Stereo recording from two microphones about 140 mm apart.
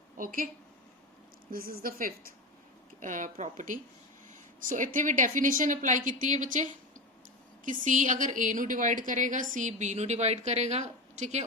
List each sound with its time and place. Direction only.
0.2 s a woman's voice: 90° right
1.5 s speech: 90° right
3.0 s a woman's voice: 65° right (ahead or behind)